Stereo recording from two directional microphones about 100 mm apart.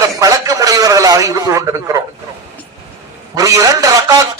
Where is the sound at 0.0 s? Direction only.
35° right (ahead or behind).